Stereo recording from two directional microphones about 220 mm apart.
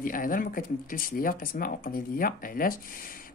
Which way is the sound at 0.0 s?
40° left (ahead or behind).